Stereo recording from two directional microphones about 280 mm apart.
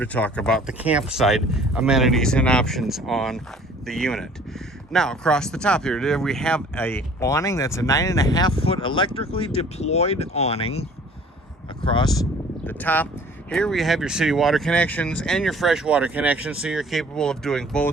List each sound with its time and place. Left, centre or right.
0.0 s speech: centre; by 10.8 s left
11.9 s speech: centre